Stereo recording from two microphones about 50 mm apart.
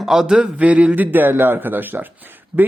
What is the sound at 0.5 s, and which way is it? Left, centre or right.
Speech, right.